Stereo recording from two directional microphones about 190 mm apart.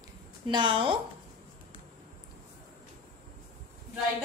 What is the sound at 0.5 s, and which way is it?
Speech, 25° right (ahead or behind).